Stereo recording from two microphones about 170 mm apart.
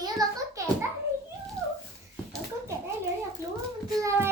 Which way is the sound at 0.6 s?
20° right (ahead or behind).